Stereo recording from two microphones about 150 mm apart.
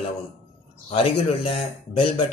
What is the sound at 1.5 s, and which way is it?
Speech, 35° left (ahead or behind).